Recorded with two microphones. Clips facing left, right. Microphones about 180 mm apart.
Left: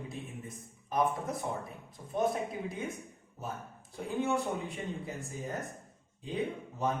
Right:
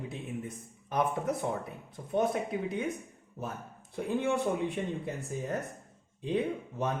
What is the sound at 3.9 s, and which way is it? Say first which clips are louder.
Speech: right 2 dB; 65° right (ahead or behind).